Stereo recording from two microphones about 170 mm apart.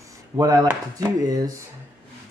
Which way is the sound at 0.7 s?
20° right (ahead or behind).